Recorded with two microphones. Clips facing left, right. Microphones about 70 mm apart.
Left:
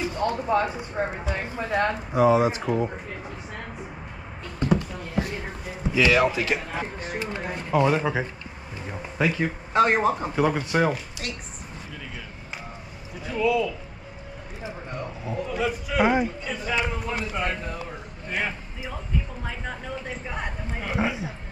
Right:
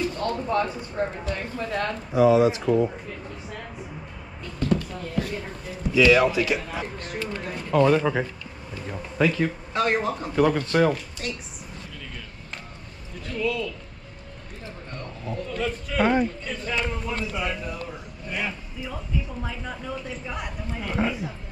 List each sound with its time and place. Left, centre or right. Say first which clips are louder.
0.0 s speech: left 1 dB; centre
4.6 s a sound: left 1 dB; centre
5.9 s a man's voice: right 2 dB; centre
7.0 s speech: left 1 dB; centre
9.8 s speech: left 4 dB; left; by 11.3 s centre
13.1 s speech: left 4 dB; centre
17.4 s a man's voice: left 1 dB; left
19.5 s speech: even; left
20.8 s speech: even; centre